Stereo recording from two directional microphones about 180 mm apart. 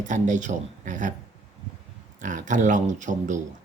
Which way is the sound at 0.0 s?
45° right (ahead or behind).